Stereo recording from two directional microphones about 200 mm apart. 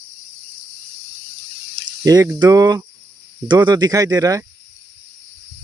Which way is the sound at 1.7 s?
20° right (ahead or behind).